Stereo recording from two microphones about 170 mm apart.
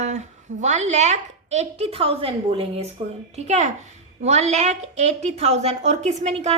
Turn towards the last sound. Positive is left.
turn(degrees=-40)  # may be behind; listen again after turning